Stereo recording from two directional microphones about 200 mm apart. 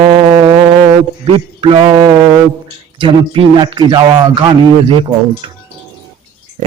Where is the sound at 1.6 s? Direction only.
25° right (ahead or behind).